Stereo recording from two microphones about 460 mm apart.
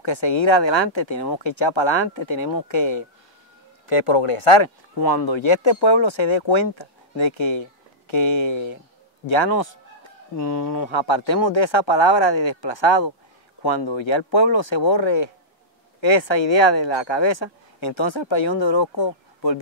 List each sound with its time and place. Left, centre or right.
0.0 s speech: left
1.4 s speech: left
5.0 s speech: left
5.4 s a man's voice: left
9.6 s speech: left